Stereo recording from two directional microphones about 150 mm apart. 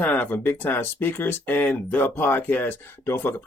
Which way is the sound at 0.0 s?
10° left (ahead or behind).